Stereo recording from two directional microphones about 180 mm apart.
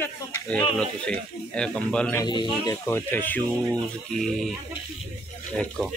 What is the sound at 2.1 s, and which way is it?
Speech, 25° left (ahead or behind).